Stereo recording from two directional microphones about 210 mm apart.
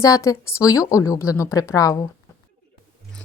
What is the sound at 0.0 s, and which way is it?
A woman's voice, 15° left (ahead or behind).